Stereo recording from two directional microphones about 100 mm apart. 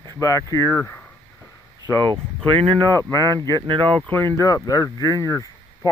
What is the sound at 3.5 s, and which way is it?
Speech, 55° right (ahead or behind).